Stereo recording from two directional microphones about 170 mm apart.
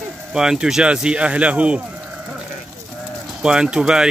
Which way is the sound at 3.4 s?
5° right (ahead or behind).